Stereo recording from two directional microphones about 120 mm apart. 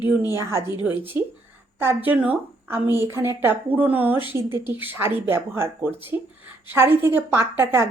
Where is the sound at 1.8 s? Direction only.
15° right (ahead or behind).